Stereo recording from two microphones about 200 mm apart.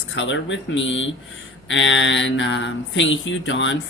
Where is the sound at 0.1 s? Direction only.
65° left (ahead or behind).